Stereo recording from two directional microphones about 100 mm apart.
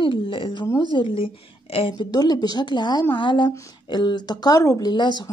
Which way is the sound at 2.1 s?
40° left (ahead or behind).